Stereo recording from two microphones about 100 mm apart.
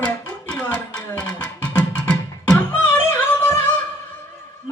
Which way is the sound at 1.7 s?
10° left (ahead or behind).